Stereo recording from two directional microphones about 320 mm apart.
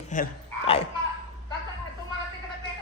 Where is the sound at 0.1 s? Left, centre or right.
Left.